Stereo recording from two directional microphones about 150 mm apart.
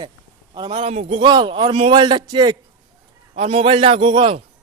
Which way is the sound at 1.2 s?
30° right (ahead or behind).